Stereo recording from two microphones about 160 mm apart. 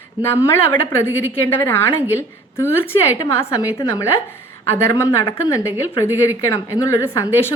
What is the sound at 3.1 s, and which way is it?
Speech, 20° left (ahead or behind).